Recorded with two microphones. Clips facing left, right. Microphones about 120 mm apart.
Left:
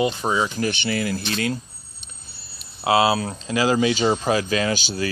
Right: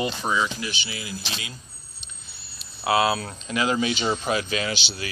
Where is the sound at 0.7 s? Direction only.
55° left (ahead or behind).